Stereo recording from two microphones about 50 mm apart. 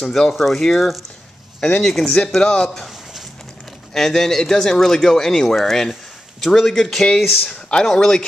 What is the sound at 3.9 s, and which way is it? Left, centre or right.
Speech, centre.